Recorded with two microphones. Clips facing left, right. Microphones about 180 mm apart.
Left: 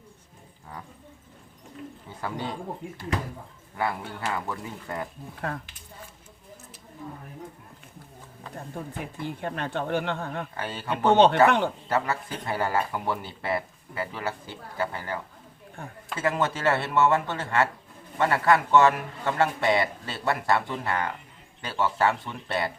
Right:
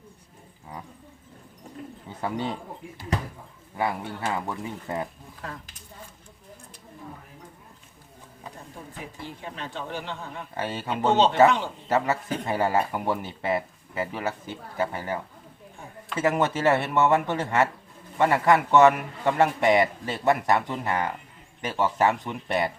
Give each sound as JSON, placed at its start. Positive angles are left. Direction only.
{"t": 2.0, "sound": "speech", "side_deg": -20}
{"t": 3.8, "sound": "speech", "side_deg": -15}
{"t": 5.4, "sound": "speech", "side_deg": 60}
{"t": 9.2, "sound": "speech", "side_deg": 55}
{"t": 10.6, "sound": "speech", "side_deg": -25}
{"t": 10.9, "sound": "speech", "side_deg": 60}
{"t": 11.9, "sound": "speech", "side_deg": -20}
{"t": 15.8, "sound": "speech", "side_deg": 60}
{"t": 16.1, "sound": "a man's voice", "side_deg": -20}